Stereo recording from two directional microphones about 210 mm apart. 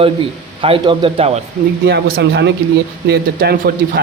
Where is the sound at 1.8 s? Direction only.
50° right (ahead or behind).